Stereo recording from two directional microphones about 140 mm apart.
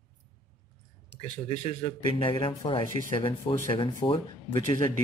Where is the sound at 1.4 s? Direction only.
50° left (ahead or behind).